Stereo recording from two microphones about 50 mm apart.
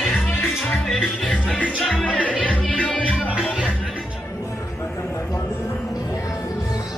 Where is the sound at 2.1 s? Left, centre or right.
Left.